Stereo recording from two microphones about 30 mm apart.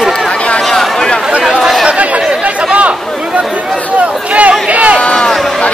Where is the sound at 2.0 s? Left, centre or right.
Right.